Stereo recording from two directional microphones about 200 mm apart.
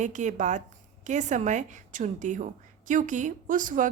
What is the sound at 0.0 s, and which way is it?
A woman's voice, 35° right (ahead or behind).